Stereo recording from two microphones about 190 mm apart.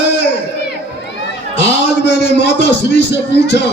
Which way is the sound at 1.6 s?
65° left (ahead or behind).